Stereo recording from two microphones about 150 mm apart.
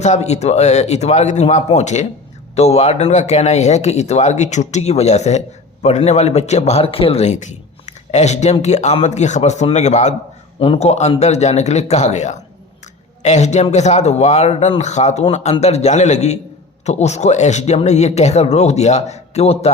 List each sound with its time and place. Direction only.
0.0 s speech: 50° left (ahead or behind)
7.9 s a sound: 50° left (ahead or behind)
8.6 s speech: 50° left (ahead or behind)